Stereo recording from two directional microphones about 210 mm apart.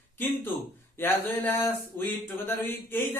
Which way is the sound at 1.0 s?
10° left (ahead or behind).